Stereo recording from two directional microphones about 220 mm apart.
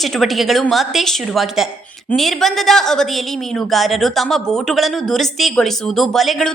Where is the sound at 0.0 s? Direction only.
Centre (ahead or behind).